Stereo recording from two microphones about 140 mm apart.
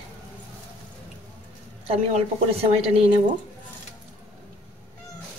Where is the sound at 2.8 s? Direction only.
45° right (ahead or behind).